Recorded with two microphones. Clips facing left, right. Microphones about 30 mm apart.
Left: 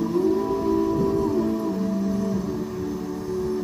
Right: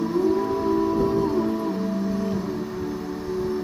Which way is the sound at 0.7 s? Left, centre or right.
Right.